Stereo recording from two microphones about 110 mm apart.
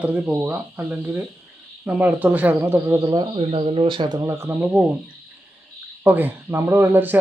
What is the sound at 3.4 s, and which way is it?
Speech, 60° right (ahead or behind).